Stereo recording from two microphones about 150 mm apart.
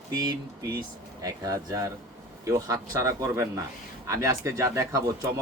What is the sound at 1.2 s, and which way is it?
Speech, 25° right (ahead or behind).